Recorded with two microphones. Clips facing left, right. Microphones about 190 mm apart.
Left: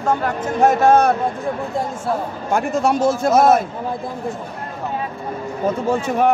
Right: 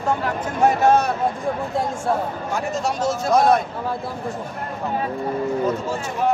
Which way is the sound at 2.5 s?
55° left (ahead or behind).